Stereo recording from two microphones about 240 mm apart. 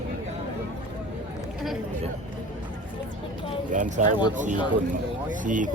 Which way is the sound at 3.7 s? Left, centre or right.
Right.